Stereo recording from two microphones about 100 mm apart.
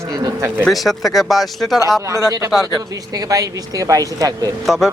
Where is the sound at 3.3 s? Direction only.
35° right (ahead or behind).